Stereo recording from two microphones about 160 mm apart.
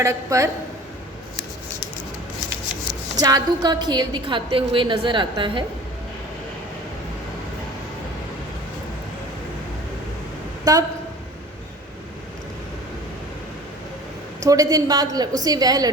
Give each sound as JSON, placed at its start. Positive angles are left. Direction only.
{"t": 0.0, "sound": "a woman's voice", "side_deg": -20}
{"t": 3.2, "sound": "a woman's voice", "side_deg": -25}
{"t": 10.7, "sound": "speech", "side_deg": -25}
{"t": 14.4, "sound": "a woman's voice", "side_deg": -20}